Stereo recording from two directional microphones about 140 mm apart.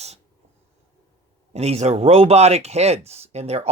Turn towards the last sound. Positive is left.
turn(degrees=-50)  # may be behind; listen again after turning